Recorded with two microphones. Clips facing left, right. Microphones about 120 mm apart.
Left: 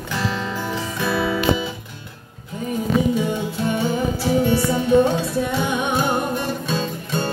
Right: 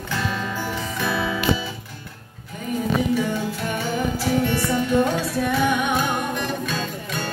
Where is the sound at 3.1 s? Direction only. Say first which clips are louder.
Left 1 dB; 25° left (ahead or behind).